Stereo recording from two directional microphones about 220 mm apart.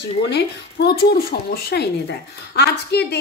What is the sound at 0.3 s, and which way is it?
A woman's voice, 50° left (ahead or behind).